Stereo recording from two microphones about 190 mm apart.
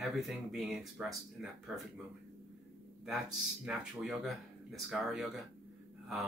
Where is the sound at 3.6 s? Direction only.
Centre (ahead or behind).